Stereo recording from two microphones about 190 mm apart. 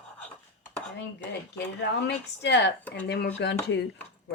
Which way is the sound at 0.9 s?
60° left (ahead or behind).